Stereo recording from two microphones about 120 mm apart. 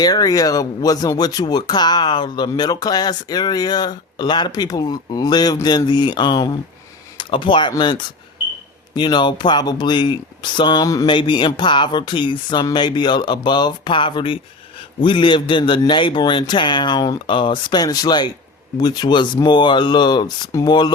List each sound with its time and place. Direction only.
0.0 s a man's voice: 30° left (ahead or behind)
20.5 s speech: 25° left (ahead or behind)